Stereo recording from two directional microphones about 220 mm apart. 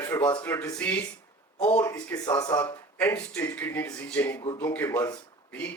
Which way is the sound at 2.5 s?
5° left (ahead or behind).